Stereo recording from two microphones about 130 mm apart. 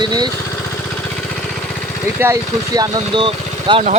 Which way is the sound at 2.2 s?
25° right (ahead or behind).